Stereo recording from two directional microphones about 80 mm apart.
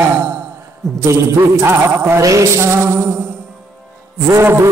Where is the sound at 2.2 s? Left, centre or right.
Right.